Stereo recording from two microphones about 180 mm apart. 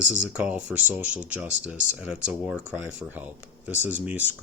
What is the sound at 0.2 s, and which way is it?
Speech, 5° right (ahead or behind).